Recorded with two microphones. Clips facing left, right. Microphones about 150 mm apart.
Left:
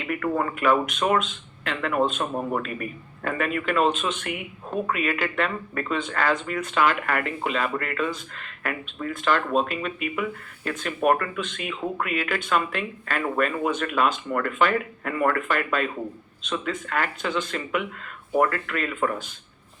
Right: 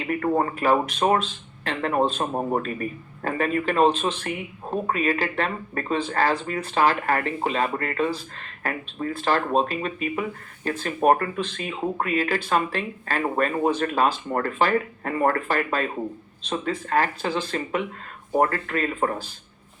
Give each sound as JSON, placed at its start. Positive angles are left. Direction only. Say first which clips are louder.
{"t": 0.0, "sound": "speech", "louder": "right 3 dB", "side_deg": -35}